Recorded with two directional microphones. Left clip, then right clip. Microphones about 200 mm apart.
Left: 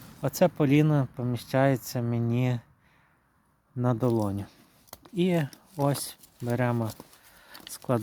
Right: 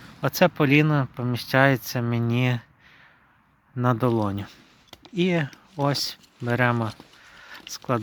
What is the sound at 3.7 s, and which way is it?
Speech, 5° left (ahead or behind).